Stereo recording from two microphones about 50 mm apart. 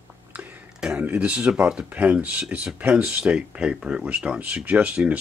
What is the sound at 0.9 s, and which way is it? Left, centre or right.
Speech, right.